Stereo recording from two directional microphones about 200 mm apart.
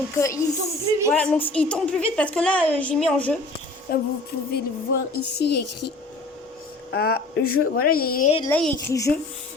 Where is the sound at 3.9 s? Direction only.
50° left (ahead or behind).